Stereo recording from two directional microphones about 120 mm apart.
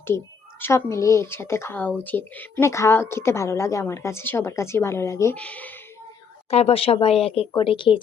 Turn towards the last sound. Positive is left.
turn(degrees=45)  # may be behind; listen again after turning